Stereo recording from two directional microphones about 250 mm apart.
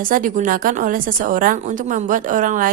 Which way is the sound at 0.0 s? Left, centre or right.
Right.